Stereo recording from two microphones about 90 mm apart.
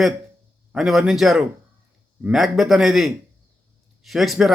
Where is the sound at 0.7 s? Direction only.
5° right (ahead or behind).